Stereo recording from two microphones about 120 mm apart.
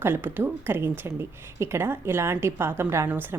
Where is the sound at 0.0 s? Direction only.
15° right (ahead or behind).